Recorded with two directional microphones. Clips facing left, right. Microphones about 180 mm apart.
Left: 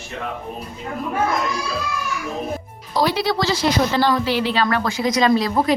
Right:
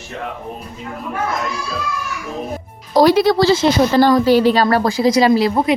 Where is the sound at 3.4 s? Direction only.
30° right (ahead or behind).